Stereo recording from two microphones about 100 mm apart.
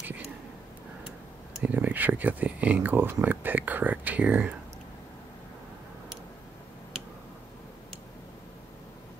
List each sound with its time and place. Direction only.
1.6 s speech: 15° right (ahead or behind)